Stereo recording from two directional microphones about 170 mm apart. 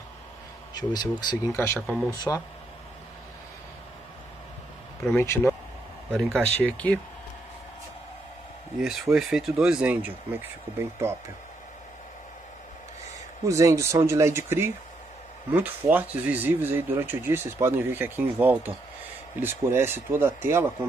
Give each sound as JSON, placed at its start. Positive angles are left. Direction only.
{"t": 0.7, "sound": "speech", "side_deg": 25}
{"t": 1.9, "sound": "speech", "side_deg": -10}
{"t": 5.0, "sound": "speech", "side_deg": 15}
{"t": 8.8, "sound": "speech", "side_deg": 0}
{"t": 13.5, "sound": "speech", "side_deg": -15}